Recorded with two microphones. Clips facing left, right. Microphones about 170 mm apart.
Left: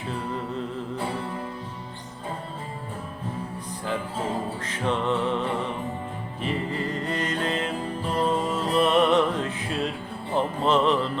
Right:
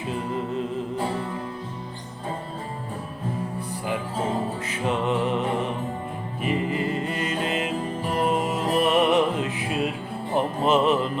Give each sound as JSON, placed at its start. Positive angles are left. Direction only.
{"t": 0.1, "sound": "music", "side_deg": -15}
{"t": 4.7, "sound": "music", "side_deg": -15}